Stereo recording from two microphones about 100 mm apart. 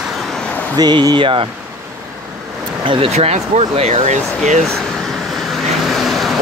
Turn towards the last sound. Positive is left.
turn(degrees=0)  # may be behind; listen again after turning